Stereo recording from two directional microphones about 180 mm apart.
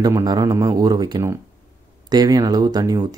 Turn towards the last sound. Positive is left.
turn(degrees=-20)  # may be behind; listen again after turning